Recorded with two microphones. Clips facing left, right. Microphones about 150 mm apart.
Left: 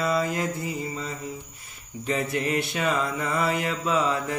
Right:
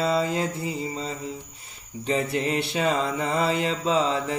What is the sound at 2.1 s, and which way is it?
Mantra, 30° right (ahead or behind).